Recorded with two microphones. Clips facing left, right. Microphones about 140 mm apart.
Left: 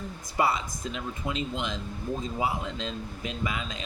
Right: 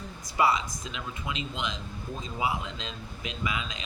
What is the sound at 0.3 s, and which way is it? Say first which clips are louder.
Speech: right 1 dB; 50° left (ahead or behind).